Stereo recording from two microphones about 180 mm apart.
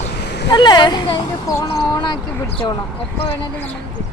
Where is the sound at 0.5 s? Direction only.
25° left (ahead or behind).